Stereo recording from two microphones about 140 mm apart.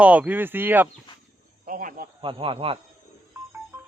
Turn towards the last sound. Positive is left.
turn(degrees=-15)  # may be behind; listen again after turning